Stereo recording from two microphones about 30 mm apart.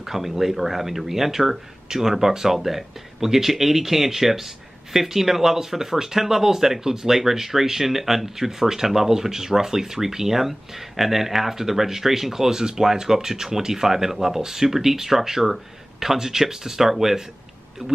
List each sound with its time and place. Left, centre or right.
0.0 s speech: centre
17.8 s speech: right